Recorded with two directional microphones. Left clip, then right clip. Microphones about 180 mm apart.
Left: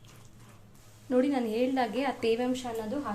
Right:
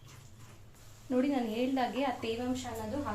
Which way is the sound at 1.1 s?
25° left (ahead or behind).